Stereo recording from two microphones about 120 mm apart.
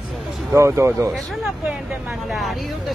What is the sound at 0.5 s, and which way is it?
Speech, 25° right (ahead or behind).